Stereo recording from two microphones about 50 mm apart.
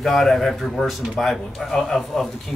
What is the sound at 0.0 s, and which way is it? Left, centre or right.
A man's voice, centre.